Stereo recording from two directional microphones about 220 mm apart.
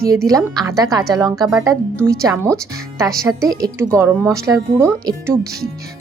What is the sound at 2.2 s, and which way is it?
Speech, 10° right (ahead or behind).